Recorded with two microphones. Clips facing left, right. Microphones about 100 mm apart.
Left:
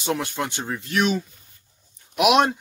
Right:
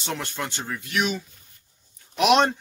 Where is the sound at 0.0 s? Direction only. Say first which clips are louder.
Left 5 dB; 10° left (ahead or behind).